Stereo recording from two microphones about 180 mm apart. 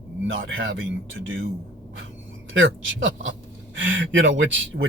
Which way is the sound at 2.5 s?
90° right.